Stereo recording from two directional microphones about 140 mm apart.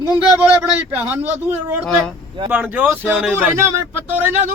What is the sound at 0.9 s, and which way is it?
Speech, 10° right (ahead or behind).